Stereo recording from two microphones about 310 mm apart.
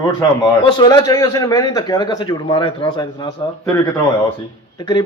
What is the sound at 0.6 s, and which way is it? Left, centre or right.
A man's voice, centre.